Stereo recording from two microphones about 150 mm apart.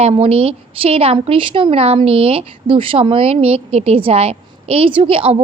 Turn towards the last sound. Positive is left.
turn(degrees=-40)  # may be behind; listen again after turning